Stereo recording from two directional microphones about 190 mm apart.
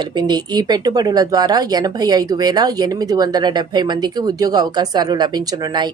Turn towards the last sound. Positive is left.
turn(degrees=-20)  # may be behind; listen again after turning